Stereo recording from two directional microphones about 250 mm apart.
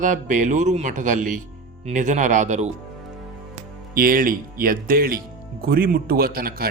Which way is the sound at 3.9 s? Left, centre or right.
Right.